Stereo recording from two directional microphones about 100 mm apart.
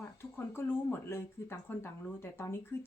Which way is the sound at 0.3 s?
25° left (ahead or behind).